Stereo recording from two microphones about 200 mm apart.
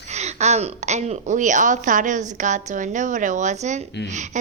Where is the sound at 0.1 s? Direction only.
35° right (ahead or behind).